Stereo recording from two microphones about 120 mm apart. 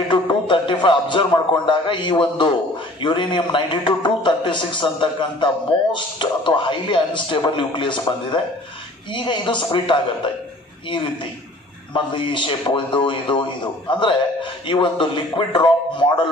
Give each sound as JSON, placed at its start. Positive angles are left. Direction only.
{"t": 0.1, "sound": "a man's voice", "side_deg": 40}
{"t": 11.9, "sound": "a man's voice", "side_deg": 45}